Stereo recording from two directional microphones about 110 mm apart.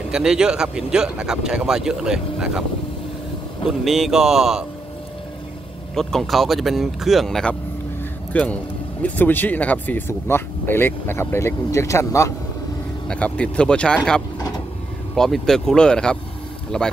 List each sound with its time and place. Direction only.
0.1 s speech: 5° right (ahead or behind)
3.8 s speech: 5° right (ahead or behind)
5.9 s speech: centre (ahead or behind); by 12.3 s 30° left (ahead or behind)
13.1 s speech: 10° left (ahead or behind)
15.1 s speech: 5° left (ahead or behind)